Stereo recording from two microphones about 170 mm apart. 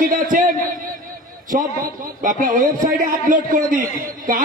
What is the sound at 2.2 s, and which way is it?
A man's voice, 50° right (ahead or behind).